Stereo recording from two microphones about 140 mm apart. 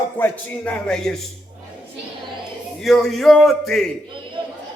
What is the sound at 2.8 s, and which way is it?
A man's voice, centre (ahead or behind).